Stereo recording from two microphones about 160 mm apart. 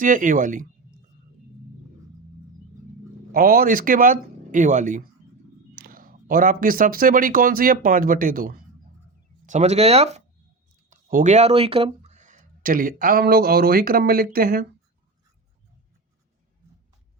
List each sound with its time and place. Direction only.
0.0 s speech: 55° right (ahead or behind)
3.3 s speech: 65° right (ahead or behind)
5.7 s speech: 65° right (ahead or behind)
9.5 s speech: 45° right (ahead or behind); by 14.7 s 70° right (ahead or behind)